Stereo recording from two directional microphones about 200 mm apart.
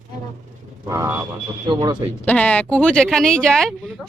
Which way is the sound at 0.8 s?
15° right (ahead or behind).